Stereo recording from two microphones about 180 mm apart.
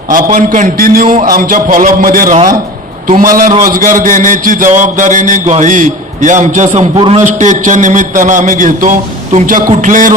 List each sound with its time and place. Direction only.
0.1 s a man's voice: 50° right (ahead or behind)
6.9 s a man's voice: 30° right (ahead or behind)
7.2 s a man's voice: 40° right (ahead or behind)